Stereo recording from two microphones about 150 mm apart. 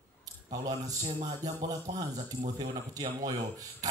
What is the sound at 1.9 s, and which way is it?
Speech, 30° right (ahead or behind).